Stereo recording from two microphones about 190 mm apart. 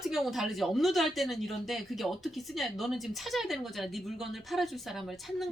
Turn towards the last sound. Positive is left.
turn(degrees=0)  # may be behind; listen again after turning